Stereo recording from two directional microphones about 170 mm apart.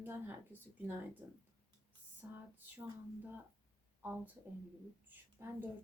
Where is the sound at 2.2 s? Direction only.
15° right (ahead or behind).